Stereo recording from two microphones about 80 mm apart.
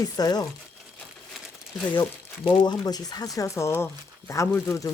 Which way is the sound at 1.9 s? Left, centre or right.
Left.